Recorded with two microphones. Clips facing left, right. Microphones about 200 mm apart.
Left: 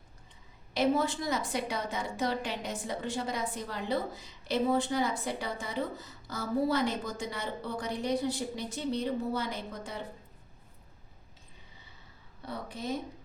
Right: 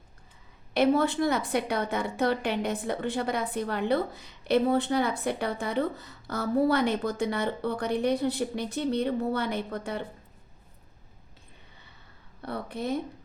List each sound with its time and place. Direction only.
0.7 s a woman's voice: 60° right (ahead or behind)
12.4 s a woman's voice: 60° right (ahead or behind)